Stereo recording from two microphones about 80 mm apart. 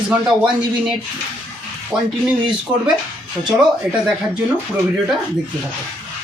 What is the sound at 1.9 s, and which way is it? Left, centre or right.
Speech, centre.